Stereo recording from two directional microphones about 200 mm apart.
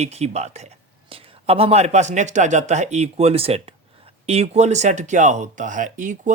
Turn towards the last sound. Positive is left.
turn(degrees=-40)  # may be behind; listen again after turning